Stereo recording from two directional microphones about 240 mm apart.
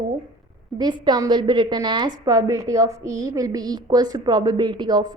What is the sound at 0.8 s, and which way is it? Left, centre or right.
A woman's voice, centre.